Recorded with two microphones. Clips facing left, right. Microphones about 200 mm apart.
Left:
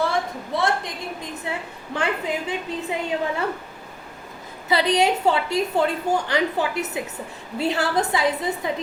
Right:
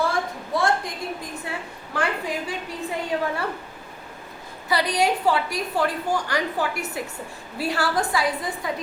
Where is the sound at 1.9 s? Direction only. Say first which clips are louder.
Left 1 dB; 20° left (ahead or behind).